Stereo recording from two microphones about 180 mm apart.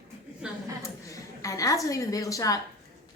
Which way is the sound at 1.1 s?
20° left (ahead or behind).